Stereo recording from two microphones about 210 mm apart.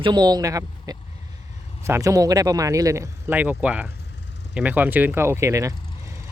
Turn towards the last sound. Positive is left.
turn(degrees=-15)  # may be behind; listen again after turning